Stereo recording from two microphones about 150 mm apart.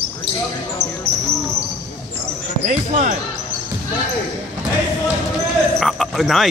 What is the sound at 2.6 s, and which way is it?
Speech, 55° right (ahead or behind).